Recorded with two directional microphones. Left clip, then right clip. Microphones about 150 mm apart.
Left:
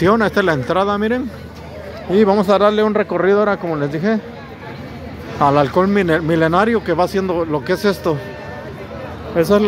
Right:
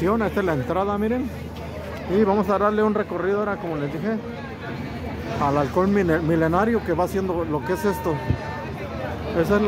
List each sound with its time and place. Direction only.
0.0 s speech: 35° left (ahead or behind)
5.4 s speech: 30° left (ahead or behind)
9.4 s speech: 45° left (ahead or behind)